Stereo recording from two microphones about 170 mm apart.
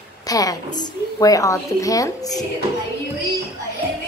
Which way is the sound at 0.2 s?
20° left (ahead or behind).